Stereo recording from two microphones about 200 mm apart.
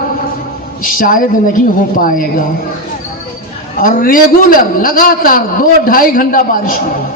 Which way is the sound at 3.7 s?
45° left (ahead or behind).